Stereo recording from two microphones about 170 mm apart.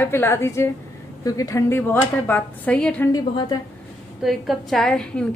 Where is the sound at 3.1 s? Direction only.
25° left (ahead or behind).